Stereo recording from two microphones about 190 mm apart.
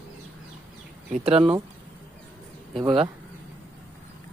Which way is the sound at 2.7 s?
30° right (ahead or behind).